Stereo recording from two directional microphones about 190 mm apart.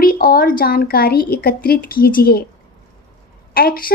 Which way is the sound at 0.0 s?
50° left (ahead or behind).